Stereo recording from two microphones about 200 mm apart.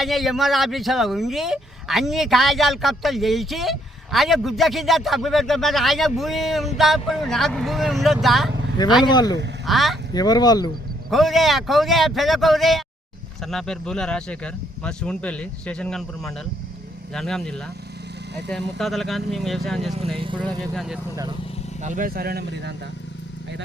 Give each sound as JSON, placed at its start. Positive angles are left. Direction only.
{"t": 0.0, "sound": "speech", "side_deg": 0}
{"t": 9.0, "sound": "speech", "side_deg": 20}
{"t": 9.6, "sound": "speech", "side_deg": 0}
{"t": 10.2, "sound": "speech", "side_deg": 20}
{"t": 11.1, "sound": "speech", "side_deg": 0}
{"t": 20.1, "sound": "speech", "side_deg": -25}
{"t": 20.4, "sound": "speech", "side_deg": 0}
{"t": 21.8, "sound": "speech", "side_deg": -40}